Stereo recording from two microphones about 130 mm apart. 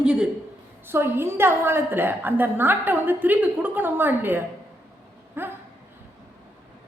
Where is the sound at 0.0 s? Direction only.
5° right (ahead or behind).